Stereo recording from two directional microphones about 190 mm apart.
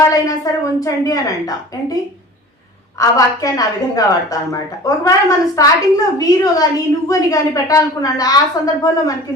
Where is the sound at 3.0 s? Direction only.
15° left (ahead or behind).